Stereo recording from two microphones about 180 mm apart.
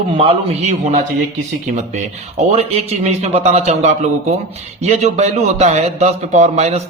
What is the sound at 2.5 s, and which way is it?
Speech, 35° right (ahead or behind).